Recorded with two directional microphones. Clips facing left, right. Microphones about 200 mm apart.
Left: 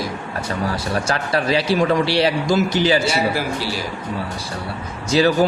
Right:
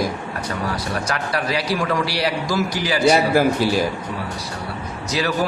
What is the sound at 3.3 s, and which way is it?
Speech, 50° right (ahead or behind).